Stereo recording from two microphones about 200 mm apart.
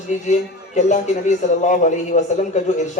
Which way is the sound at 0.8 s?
35° left (ahead or behind).